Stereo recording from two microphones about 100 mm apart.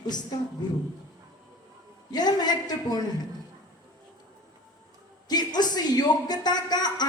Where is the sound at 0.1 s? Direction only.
45° left (ahead or behind).